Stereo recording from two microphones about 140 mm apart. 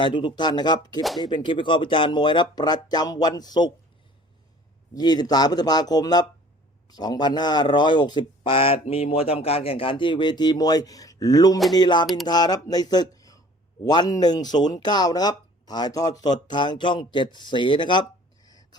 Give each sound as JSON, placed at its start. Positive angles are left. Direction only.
{"t": 0.0, "sound": "speech", "side_deg": 35}
{"t": 4.9, "sound": "speech", "side_deg": 30}
{"t": 18.4, "sound": "a sound", "side_deg": 25}